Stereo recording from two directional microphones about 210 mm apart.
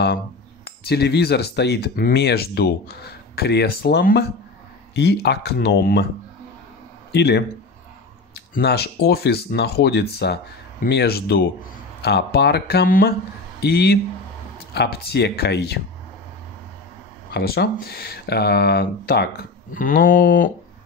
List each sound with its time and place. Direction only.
0.7 s speech: 50° left (ahead or behind)
7.1 s speech: 55° left (ahead or behind)
8.5 s a man's voice: 50° left (ahead or behind)
17.3 s speech: 50° left (ahead or behind)